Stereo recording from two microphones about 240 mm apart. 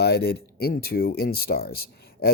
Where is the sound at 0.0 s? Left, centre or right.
Left.